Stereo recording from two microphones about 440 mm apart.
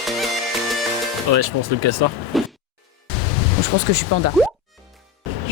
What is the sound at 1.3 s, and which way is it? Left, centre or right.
Speech, right.